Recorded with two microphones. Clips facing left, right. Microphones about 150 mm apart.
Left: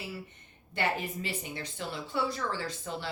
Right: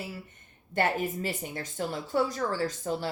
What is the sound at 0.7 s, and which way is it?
A woman's voice, 45° right (ahead or behind).